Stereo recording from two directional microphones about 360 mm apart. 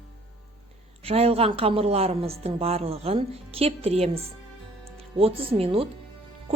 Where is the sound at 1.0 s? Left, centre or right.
Centre.